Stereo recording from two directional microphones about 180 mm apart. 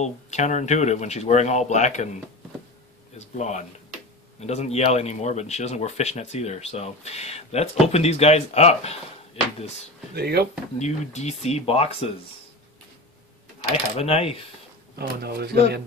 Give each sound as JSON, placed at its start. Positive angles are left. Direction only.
{"t": 0.0, "sound": "speech", "side_deg": 40}
{"t": 3.2, "sound": "speech", "side_deg": 40}
{"t": 10.1, "sound": "speech", "side_deg": -65}
{"t": 10.8, "sound": "speech", "side_deg": 40}
{"t": 13.9, "sound": "speech", "side_deg": 35}
{"t": 15.0, "sound": "speech", "side_deg": -60}